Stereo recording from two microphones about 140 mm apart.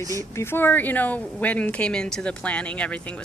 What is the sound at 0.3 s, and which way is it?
Speech, 15° left (ahead or behind).